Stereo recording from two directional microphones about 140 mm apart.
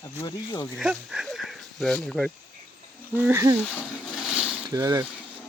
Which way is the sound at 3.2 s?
20° right (ahead or behind).